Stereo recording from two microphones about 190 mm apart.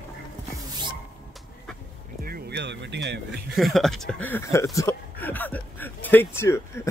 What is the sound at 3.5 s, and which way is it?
Speech, centre (ahead or behind).